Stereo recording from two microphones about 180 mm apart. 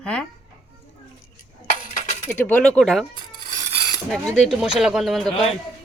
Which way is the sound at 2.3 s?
10° left (ahead or behind).